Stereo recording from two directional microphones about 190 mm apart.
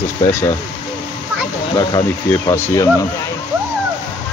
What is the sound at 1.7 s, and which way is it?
Speech, 25° left (ahead or behind).